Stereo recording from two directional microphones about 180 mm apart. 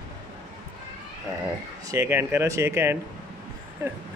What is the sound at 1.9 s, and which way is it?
Speech, 15° right (ahead or behind).